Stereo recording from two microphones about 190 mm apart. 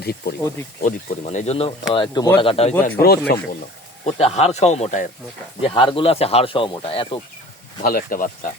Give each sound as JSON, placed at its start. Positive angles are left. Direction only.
{"t": 0.0, "sound": "speech", "side_deg": 55}
{"t": 0.8, "sound": "speech", "side_deg": 40}
{"t": 3.0, "sound": "speech", "side_deg": 55}
{"t": 4.0, "sound": "speech", "side_deg": 35}
{"t": 5.6, "sound": "speech", "side_deg": 25}
{"t": 7.8, "sound": "speech", "side_deg": 50}